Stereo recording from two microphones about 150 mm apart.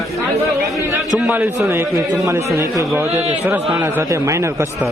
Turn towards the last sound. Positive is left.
turn(degrees=-20)  # may be behind; listen again after turning